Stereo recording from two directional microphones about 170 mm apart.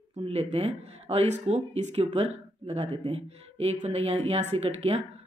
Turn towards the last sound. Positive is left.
turn(degrees=-35)  # may be behind; listen again after turning